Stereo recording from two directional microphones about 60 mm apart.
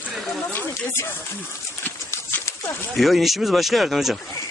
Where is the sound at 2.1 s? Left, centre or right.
Left.